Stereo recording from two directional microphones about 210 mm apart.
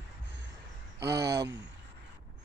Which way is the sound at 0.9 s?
50° right (ahead or behind).